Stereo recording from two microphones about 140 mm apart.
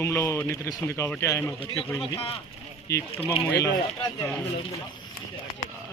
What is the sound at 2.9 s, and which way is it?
Speech, 20° left (ahead or behind).